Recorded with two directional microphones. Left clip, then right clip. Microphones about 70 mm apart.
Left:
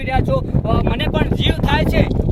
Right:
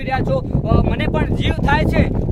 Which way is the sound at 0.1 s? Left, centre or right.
Centre.